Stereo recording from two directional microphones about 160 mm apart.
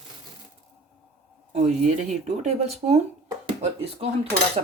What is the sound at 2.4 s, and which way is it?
Speech, 40° right (ahead or behind).